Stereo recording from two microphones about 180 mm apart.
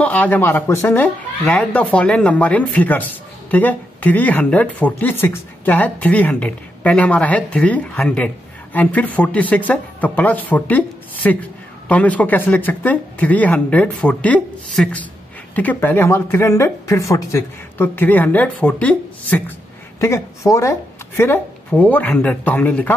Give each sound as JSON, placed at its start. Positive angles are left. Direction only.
{"t": 0.0, "sound": "speech", "side_deg": 10}